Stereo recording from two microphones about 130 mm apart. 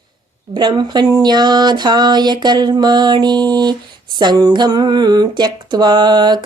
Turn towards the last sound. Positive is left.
turn(degrees=-35)  # may be behind; listen again after turning